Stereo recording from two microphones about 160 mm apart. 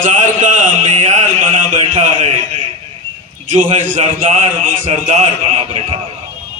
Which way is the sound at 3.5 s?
55° right (ahead or behind).